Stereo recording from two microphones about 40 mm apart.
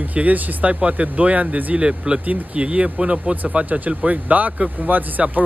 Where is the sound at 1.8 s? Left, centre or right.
Right.